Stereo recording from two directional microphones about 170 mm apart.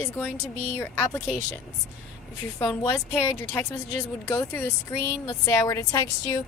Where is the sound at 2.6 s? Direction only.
15° left (ahead or behind).